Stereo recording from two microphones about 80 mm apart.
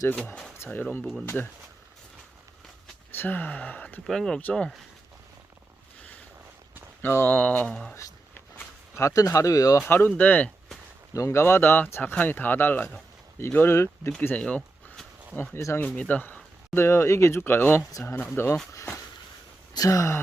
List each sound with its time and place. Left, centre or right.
0.6 s speech: left
3.1 s speech: left
4.0 s speech: centre
6.0 s boat: centre
7.0 s speech: left
8.5 s speech: left
9.8 s speech: left
11.1 s speech: left
16.0 s speech: centre
19.7 s speech: left